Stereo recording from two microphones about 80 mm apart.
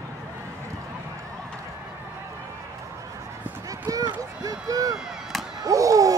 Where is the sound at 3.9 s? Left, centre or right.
Right.